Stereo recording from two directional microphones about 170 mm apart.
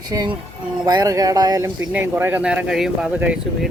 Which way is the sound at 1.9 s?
10° right (ahead or behind).